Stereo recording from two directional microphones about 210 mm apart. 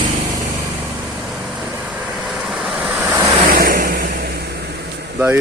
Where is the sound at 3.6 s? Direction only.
40° right (ahead or behind).